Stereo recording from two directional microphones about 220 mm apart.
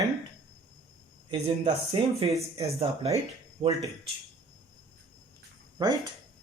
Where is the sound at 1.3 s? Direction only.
25° right (ahead or behind).